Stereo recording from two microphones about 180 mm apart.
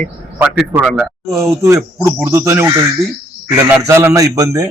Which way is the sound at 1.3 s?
15° right (ahead or behind).